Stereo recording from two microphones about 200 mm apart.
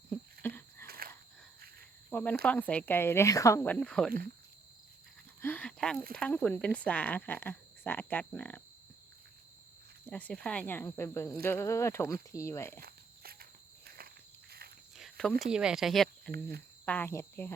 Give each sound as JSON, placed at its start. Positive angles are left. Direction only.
{"t": 0.4, "sound": "a sound", "side_deg": 10}
{"t": 0.9, "sound": "a sound", "side_deg": -45}
{"t": 2.0, "sound": "cricket", "side_deg": 10}
{"t": 2.4, "sound": "speech", "side_deg": 5}
{"t": 5.4, "sound": "a sound", "side_deg": 10}
{"t": 6.1, "sound": "speech", "side_deg": 5}
{"t": 10.1, "sound": "speech", "side_deg": 5}
{"t": 12.8, "sound": "walk", "side_deg": -50}
{"t": 14.9, "sound": "speech", "side_deg": 0}
{"t": 16.3, "sound": "speech", "side_deg": -50}
{"t": 16.8, "sound": "speech", "side_deg": 10}